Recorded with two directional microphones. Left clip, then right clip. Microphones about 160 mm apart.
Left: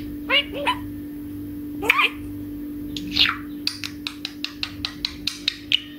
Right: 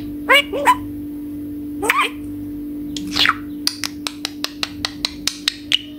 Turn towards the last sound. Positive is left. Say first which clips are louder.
# right 3 dB
turn(degrees=-35)  # may be behind; listen again after turning